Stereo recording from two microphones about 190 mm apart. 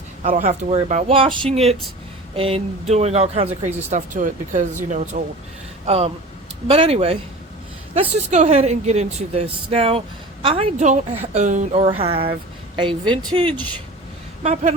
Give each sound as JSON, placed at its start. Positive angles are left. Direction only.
{"t": 0.2, "sound": "speech", "side_deg": -35}